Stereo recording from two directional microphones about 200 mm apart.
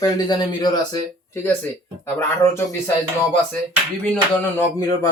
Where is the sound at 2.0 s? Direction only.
10° left (ahead or behind).